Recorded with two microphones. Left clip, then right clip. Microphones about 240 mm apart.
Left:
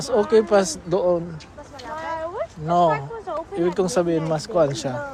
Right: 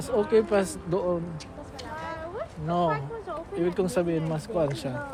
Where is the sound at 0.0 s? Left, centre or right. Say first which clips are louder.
Left 5 dB; left.